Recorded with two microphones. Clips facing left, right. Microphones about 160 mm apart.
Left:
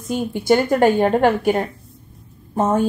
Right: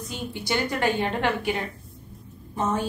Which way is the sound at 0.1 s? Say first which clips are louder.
Left 12 dB; 50° left (ahead or behind).